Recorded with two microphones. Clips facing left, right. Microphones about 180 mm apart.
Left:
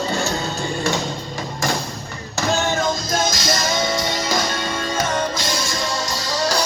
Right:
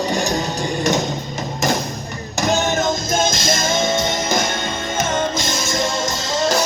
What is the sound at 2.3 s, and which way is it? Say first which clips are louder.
Music: right 2 dB; 20° right (ahead or behind).